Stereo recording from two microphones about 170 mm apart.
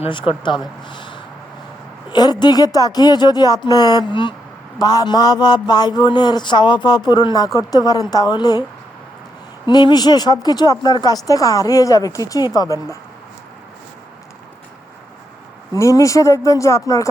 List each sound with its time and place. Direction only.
0.0 s speech: 30° left (ahead or behind)
0.9 s a sound: 30° left (ahead or behind)
2.1 s speech: 25° left (ahead or behind)
9.6 s speech: 25° left (ahead or behind)
15.7 s speech: 20° left (ahead or behind)